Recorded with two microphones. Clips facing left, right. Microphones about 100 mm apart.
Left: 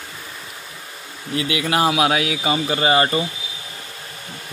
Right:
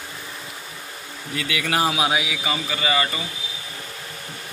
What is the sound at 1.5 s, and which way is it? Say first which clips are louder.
Speech: left 3 dB; 30° left (ahead or behind).